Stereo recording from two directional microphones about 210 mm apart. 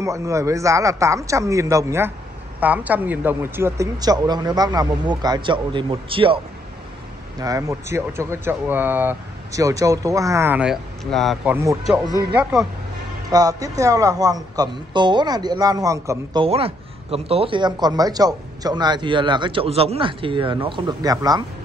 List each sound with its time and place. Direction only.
0.0 s a man's voice: 15° right (ahead or behind); by 11.5 s centre (ahead or behind)
11.5 s speech: 15° right (ahead or behind)
11.8 s speech: centre (ahead or behind)
13.3 s speech: 15° right (ahead or behind)
16.4 s a man's voice: 30° right (ahead or behind)